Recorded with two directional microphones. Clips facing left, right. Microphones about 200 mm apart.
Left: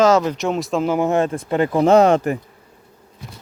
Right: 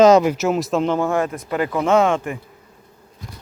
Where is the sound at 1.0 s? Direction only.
25° left (ahead or behind); by 2.3 s 40° left (ahead or behind).